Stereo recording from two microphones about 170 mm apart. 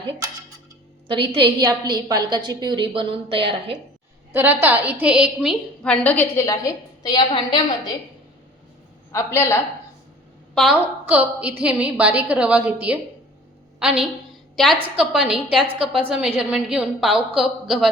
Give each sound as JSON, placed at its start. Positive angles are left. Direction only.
{"t": 1.0, "sound": "a woman's voice", "side_deg": -30}
{"t": 4.3, "sound": "a woman's voice", "side_deg": -10}
{"t": 9.1, "sound": "a woman's voice", "side_deg": 15}
{"t": 10.5, "sound": "a woman's voice", "side_deg": 0}